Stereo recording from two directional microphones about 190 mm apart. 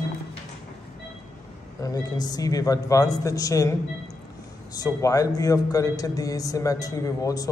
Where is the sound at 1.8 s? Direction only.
20° left (ahead or behind).